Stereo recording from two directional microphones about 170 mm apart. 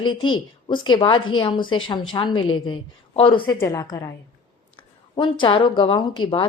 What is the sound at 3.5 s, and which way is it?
A woman's voice, 20° left (ahead or behind).